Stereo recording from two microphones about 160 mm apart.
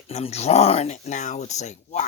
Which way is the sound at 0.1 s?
45° left (ahead or behind).